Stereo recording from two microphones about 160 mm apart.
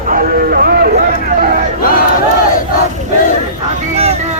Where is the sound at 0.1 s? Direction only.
65° right (ahead or behind).